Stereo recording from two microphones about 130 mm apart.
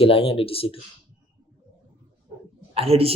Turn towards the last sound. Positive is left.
turn(degrees=-50)  # may be behind; listen again after turning